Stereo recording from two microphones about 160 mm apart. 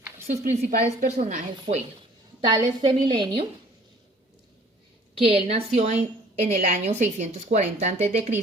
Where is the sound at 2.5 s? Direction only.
30° right (ahead or behind).